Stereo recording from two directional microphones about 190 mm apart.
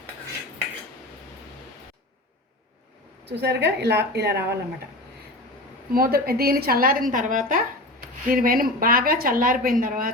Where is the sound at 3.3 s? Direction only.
60° right (ahead or behind).